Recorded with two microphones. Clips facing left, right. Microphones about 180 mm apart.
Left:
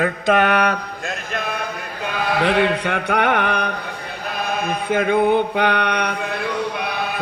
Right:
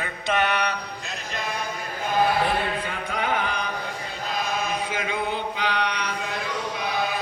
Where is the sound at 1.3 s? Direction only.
60° left (ahead or behind).